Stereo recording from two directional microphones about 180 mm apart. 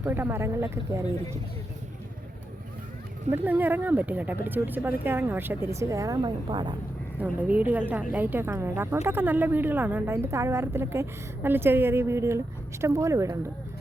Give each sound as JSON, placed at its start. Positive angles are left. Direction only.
{"t": 0.0, "sound": "a woman's voice", "side_deg": -10}
{"t": 3.2, "sound": "a woman's voice", "side_deg": -10}
{"t": 7.2, "sound": "a woman's voice", "side_deg": -10}